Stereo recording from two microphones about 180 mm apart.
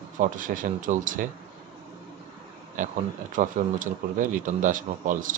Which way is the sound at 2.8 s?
45° right (ahead or behind).